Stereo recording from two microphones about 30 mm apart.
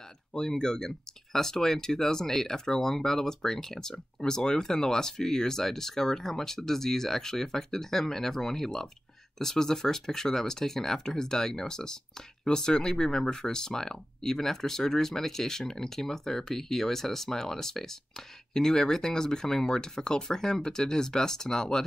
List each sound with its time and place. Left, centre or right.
0.3 s speech: left